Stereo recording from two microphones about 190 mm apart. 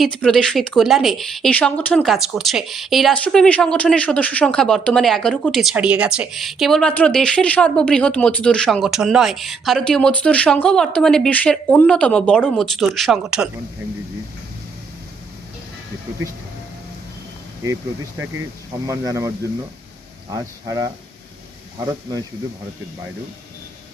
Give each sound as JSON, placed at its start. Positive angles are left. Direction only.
{"t": 0.0, "sound": "speech", "side_deg": 5}
{"t": 18.9, "sound": "speech", "side_deg": -15}
{"t": 20.3, "sound": "speech", "side_deg": -20}